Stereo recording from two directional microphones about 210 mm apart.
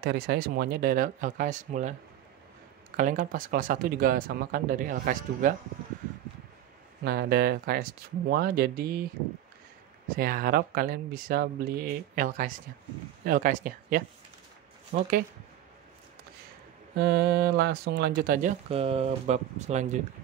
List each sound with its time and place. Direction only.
0.0 s speech: 50° right (ahead or behind)
3.0 s speech: 40° right (ahead or behind)
7.1 s speech: 50° right (ahead or behind)
10.0 s speech: 45° right (ahead or behind)
16.9 s speech: 55° right (ahead or behind)
18.7 s speech: 30° right (ahead or behind)